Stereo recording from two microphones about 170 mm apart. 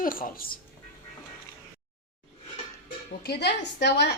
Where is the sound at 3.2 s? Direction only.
75° left (ahead or behind).